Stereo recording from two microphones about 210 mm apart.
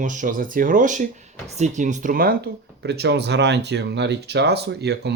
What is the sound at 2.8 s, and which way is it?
Speech, 50° right (ahead or behind).